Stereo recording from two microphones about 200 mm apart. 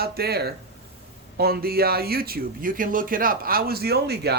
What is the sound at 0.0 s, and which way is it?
Speech, 50° right (ahead or behind).